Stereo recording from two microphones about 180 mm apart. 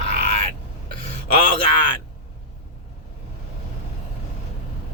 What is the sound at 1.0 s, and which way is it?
Speech, 30° left (ahead or behind).